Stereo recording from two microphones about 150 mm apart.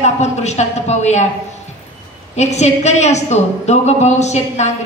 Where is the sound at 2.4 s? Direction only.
50° left (ahead or behind).